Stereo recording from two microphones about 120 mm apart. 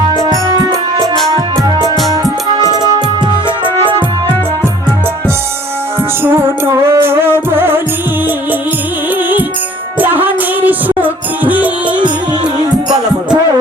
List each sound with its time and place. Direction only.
2.5 s music: 35° right (ahead or behind)
6.2 s music: 20° right (ahead or behind)
10.0 s music: 15° right (ahead or behind)